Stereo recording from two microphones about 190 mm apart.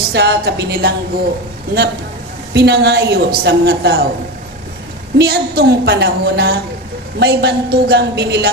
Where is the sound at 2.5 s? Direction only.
60° right (ahead or behind).